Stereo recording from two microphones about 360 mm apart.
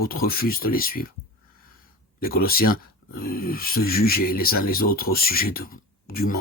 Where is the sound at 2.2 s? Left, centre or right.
Left.